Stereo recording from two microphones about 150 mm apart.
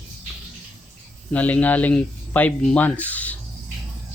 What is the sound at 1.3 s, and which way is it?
Speech, 10° left (ahead or behind).